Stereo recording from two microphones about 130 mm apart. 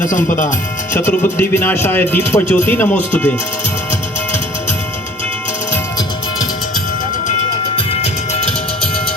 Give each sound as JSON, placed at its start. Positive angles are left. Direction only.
{"t": 0.9, "sound": "speech", "side_deg": 20}
{"t": 8.0, "sound": "music", "side_deg": 55}